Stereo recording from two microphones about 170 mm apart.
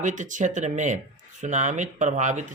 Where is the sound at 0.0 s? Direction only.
45° right (ahead or behind).